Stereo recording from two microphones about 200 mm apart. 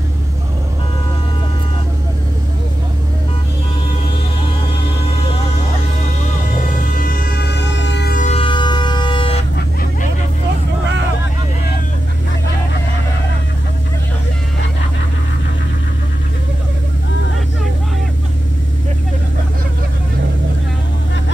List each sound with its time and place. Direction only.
6.7 s music: 45° left (ahead or behind)
8.2 s vehicle: 30° left (ahead or behind)